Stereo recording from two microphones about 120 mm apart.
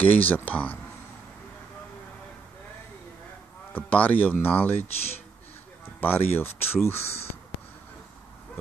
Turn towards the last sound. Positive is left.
turn(degrees=60)  # may be behind; listen again after turning